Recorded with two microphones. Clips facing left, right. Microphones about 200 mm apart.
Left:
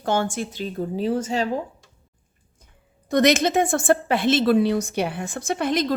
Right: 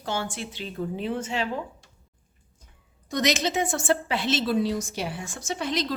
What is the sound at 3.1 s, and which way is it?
A woman's voice, 55° left (ahead or behind).